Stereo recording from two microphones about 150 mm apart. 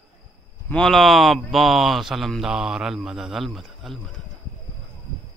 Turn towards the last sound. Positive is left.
turn(degrees=0)  # may be behind; listen again after turning